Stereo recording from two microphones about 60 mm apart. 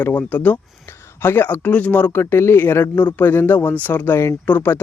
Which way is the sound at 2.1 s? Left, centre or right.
Left.